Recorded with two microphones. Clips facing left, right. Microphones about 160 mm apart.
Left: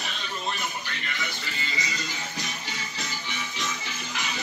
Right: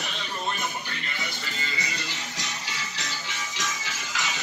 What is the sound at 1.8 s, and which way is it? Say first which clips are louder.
Music: left 1 dB; 65° right (ahead or behind).